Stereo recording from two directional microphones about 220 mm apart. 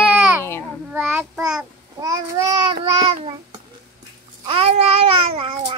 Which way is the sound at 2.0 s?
15° right (ahead or behind).